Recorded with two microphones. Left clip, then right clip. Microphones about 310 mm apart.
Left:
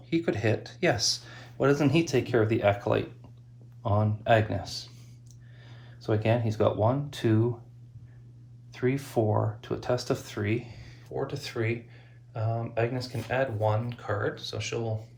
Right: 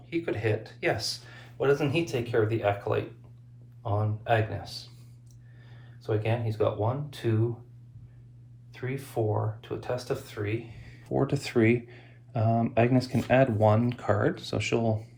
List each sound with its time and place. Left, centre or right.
0.1 s speech: centre
6.0 s speech: left
8.7 s speech: left
11.1 s speech: centre